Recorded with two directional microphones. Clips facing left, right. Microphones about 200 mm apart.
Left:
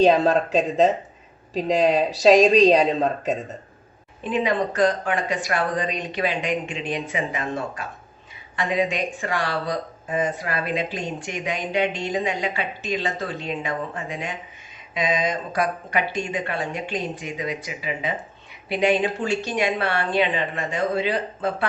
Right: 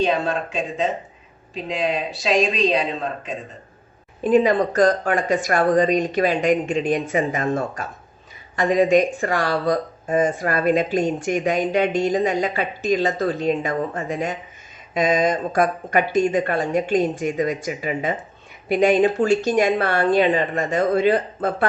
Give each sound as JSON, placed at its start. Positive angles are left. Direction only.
{"t": 0.0, "sound": "speech", "side_deg": 40}
{"t": 4.2, "sound": "speech", "side_deg": -45}